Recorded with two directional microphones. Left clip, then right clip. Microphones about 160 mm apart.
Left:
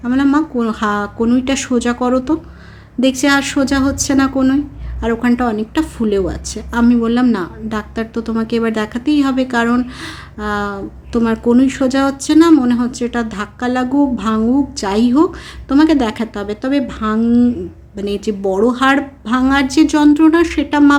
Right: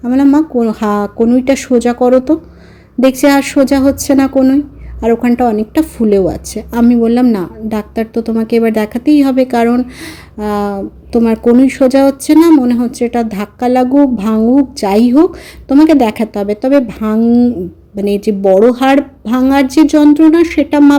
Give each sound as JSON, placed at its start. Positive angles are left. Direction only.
{"t": 0.0, "sound": "a woman's voice", "side_deg": -20}
{"t": 17.2, "sound": "speech", "side_deg": -20}
{"t": 17.9, "sound": "a woman's voice", "side_deg": -30}